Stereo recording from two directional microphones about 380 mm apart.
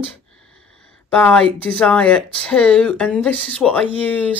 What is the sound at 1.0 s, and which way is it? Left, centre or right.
Speech, centre.